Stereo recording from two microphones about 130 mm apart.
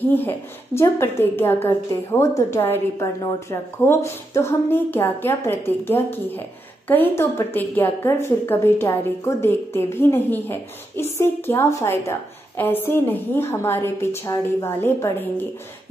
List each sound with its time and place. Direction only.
0.1 s a woman's voice: 15° left (ahead or behind)